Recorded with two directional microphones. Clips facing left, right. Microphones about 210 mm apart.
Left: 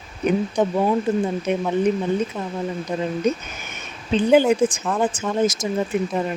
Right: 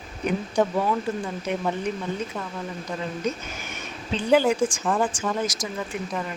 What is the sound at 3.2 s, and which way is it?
A woman's voice, 20° left (ahead or behind).